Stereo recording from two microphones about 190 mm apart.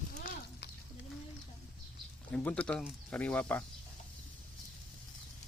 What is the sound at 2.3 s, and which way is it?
Speech, 5° left (ahead or behind).